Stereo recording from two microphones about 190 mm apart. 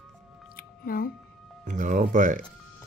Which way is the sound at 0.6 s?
50° left (ahead or behind).